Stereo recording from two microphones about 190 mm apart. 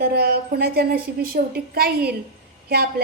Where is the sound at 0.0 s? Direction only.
55° right (ahead or behind).